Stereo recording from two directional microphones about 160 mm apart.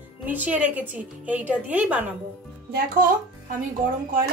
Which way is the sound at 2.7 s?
60° right (ahead or behind).